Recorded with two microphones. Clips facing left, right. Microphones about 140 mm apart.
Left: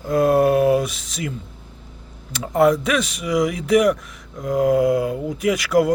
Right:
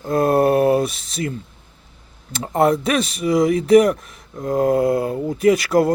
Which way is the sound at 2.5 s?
30° right (ahead or behind).